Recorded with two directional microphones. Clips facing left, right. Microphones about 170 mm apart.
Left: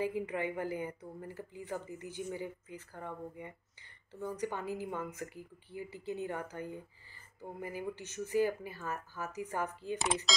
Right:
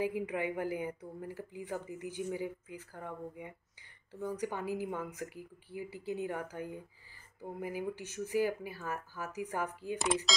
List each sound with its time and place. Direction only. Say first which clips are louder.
0.0 s speech: right 1 dB; 10° right (ahead or behind)